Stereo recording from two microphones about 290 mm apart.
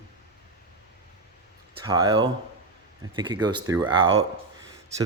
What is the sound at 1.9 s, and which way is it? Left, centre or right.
Speech, centre.